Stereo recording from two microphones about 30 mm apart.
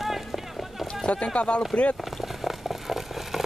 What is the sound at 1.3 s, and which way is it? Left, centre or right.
Speech, left.